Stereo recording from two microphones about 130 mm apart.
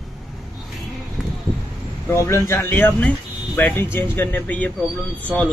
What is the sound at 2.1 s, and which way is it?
Speech, 20° left (ahead or behind).